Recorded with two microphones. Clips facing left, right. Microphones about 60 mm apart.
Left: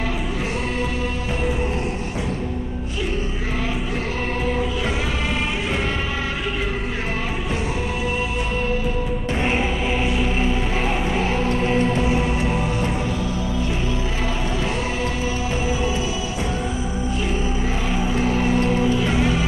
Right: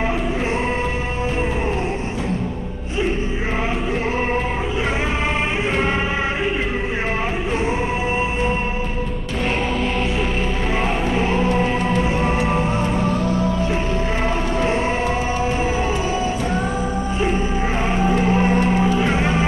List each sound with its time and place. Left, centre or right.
13.0 s music: right
17.8 s music: right